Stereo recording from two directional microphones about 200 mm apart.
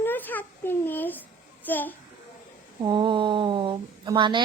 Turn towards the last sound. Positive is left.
turn(degrees=-25)  # may be behind; listen again after turning